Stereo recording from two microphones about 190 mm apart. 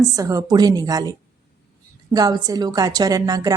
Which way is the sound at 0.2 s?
20° right (ahead or behind).